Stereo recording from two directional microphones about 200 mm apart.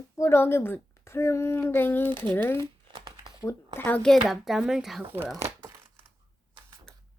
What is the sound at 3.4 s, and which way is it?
Speech, 15° left (ahead or behind).